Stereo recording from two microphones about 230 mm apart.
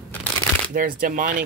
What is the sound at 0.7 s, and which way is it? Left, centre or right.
Speech, right.